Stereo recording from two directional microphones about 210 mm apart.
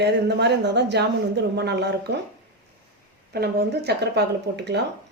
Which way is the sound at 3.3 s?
50° right (ahead or behind).